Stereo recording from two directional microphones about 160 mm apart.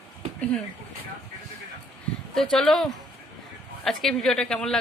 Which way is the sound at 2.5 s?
Centre (ahead or behind).